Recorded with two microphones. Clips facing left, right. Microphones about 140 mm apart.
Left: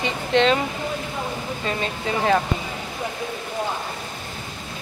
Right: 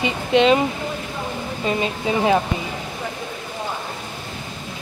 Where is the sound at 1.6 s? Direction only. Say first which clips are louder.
Right 5 dB; 15° right (ahead or behind).